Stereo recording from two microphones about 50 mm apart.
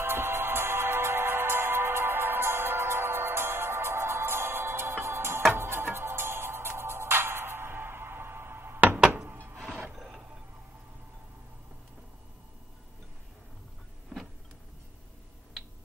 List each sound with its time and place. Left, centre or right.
0.0 s music: right
5.5 s music: right